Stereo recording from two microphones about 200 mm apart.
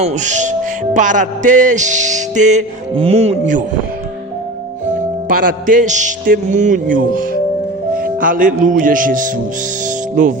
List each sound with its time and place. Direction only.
0.0 s speech: 35° right (ahead or behind)
5.3 s speech: 45° right (ahead or behind)